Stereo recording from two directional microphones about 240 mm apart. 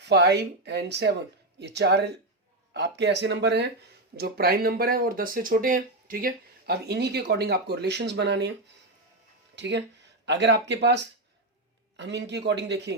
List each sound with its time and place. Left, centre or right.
0.0 s speech: right
9.6 s speech: right